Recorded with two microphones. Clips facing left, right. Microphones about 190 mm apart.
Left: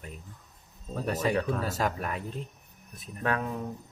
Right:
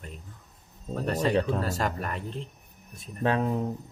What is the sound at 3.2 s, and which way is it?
Speech, 25° right (ahead or behind).